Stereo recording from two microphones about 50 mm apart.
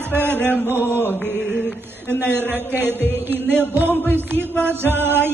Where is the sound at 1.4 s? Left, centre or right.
Centre.